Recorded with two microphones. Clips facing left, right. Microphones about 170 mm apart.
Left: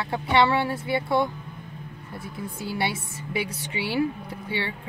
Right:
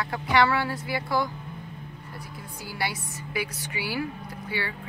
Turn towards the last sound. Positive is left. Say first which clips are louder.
# left 2 dB
turn(degrees=25)  # may be behind; listen again after turning